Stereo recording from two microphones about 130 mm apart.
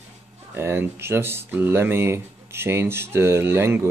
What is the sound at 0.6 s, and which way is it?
Speech, 20° right (ahead or behind).